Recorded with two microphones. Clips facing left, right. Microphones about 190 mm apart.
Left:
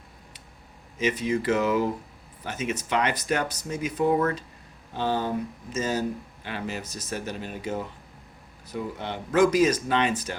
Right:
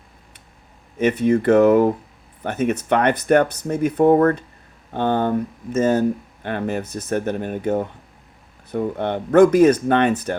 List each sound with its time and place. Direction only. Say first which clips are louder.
0.9 s speech: right 8 dB; 60° right (ahead or behind)